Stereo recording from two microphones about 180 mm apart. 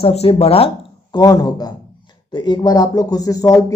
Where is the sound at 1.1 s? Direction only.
20° left (ahead or behind).